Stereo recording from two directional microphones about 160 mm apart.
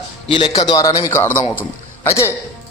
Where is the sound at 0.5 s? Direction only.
25° left (ahead or behind).